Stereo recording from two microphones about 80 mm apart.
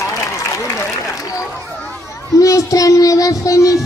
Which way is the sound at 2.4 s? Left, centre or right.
Left.